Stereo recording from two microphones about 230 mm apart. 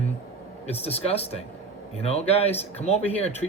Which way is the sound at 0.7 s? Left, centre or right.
Left.